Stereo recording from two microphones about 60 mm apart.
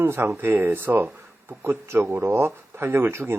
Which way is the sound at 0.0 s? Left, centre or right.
Right.